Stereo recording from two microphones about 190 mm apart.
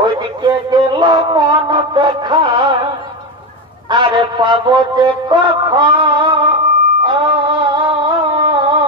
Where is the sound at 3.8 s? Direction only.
25° right (ahead or behind).